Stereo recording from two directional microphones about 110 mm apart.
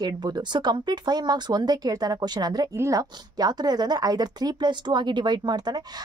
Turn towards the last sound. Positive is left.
turn(degrees=-40)  # may be behind; listen again after turning